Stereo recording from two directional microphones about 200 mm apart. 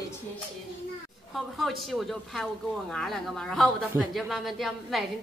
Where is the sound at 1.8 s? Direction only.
Centre (ahead or behind).